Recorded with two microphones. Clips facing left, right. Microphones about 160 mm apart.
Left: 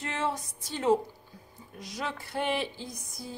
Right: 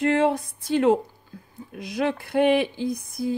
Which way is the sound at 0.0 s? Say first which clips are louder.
Right 12 dB; 65° right (ahead or behind).